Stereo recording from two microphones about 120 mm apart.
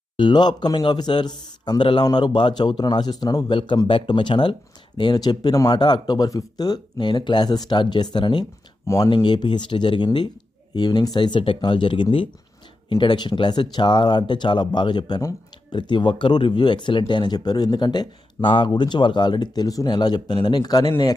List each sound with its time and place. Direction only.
0.2 s speech: 40° left (ahead or behind)